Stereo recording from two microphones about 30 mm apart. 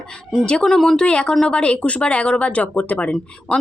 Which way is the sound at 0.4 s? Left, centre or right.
Left.